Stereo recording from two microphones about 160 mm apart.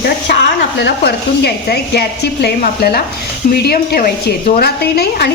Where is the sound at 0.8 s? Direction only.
90° left.